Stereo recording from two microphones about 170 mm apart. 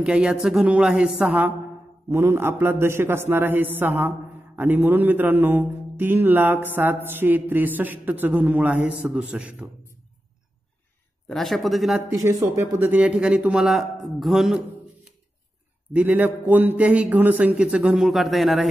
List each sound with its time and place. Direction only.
0.0 s a man's voice: 5° right (ahead or behind)
11.2 s speech: centre (ahead or behind)
12.1 s a man's voice: 15° right (ahead or behind); by 14.6 s centre (ahead or behind)
15.9 s a man's voice: 10° right (ahead or behind)